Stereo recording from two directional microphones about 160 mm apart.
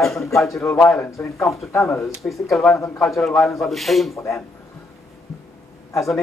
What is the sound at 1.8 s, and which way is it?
Speech, 20° left (ahead or behind).